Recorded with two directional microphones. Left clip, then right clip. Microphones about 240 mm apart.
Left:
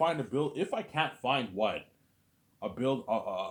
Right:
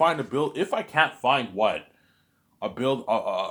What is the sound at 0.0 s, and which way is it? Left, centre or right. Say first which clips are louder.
Speech: right 7 dB; right.